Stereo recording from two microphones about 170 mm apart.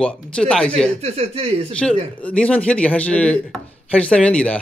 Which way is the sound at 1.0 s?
35° right (ahead or behind).